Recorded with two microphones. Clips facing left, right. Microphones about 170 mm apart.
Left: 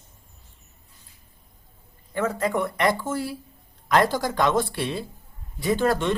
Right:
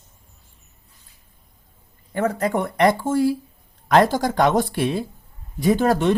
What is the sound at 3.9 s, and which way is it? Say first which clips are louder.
Speech: right 4 dB; 55° right (ahead or behind).